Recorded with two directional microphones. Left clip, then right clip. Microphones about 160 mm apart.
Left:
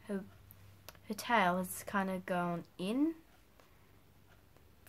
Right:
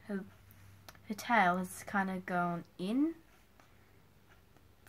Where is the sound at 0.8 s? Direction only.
20° left (ahead or behind).